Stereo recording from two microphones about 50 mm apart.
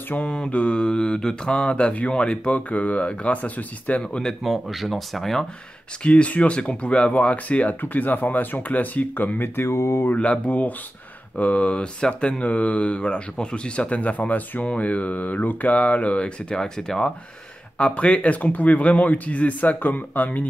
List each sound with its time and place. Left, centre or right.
0.3 s mantra: left
4.0 s speech: centre
4.4 s speech: centre
6.0 s mantra: left
7.8 s speech: left
9.7 s speech: left
10.4 s speech: left
11.3 s mantra: left; by 17.1 s centre
17.7 s mantra: left